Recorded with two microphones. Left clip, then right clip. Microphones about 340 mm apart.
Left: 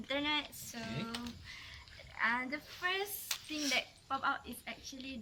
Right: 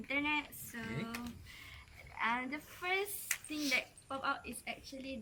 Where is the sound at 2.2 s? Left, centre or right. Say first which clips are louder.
Left 2 dB; centre.